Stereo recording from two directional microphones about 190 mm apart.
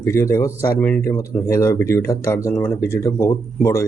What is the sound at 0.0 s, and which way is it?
A man's voice, 15° left (ahead or behind).